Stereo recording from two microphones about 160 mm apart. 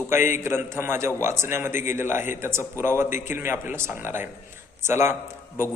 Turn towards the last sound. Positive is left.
turn(degrees=-15)  # may be behind; listen again after turning